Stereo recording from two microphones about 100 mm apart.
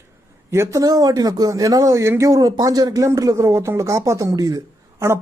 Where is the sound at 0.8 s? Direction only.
40° right (ahead or behind).